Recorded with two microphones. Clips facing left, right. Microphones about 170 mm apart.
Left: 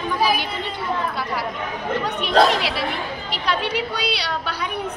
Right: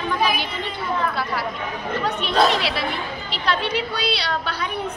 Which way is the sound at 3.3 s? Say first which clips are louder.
Even; 15° left (ahead or behind).